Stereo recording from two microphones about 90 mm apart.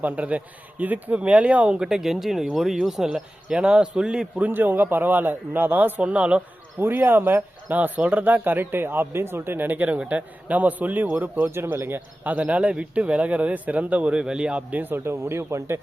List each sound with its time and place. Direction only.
0.0 s speech: 15° right (ahead or behind)
4.4 s speech: 20° right (ahead or behind)